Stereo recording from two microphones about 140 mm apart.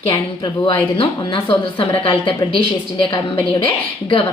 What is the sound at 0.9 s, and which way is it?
A woman's voice, 40° left (ahead or behind).